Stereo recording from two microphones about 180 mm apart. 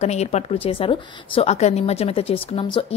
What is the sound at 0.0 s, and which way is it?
Speech, 35° left (ahead or behind).